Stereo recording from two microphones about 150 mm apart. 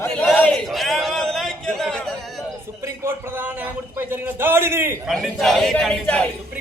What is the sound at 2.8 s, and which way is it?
Speech, 15° right (ahead or behind).